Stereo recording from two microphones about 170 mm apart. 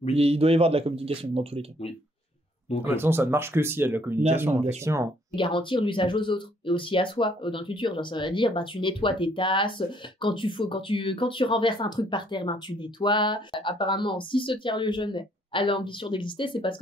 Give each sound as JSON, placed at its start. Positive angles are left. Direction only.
{"t": 0.1, "sound": "speech", "side_deg": -35}
{"t": 2.8, "sound": "speech", "side_deg": -15}
{"t": 5.3, "sound": "speech", "side_deg": 30}